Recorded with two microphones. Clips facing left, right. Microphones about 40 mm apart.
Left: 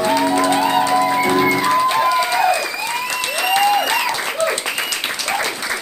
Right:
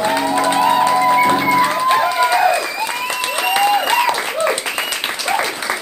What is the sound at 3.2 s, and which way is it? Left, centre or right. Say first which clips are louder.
Applause: right 1 dB; centre.